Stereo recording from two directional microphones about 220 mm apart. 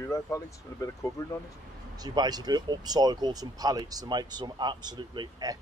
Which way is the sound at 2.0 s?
20° right (ahead or behind).